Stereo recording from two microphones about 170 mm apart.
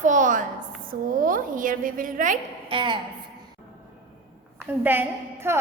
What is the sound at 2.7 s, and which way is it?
Speech, 30° right (ahead or behind).